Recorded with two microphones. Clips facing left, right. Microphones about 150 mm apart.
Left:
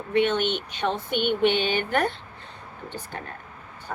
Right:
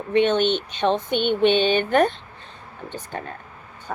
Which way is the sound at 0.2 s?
25° right (ahead or behind).